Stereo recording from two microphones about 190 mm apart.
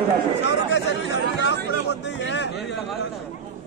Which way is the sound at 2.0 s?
65° left (ahead or behind).